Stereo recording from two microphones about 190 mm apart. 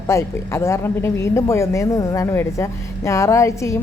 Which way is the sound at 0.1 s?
15° left (ahead or behind).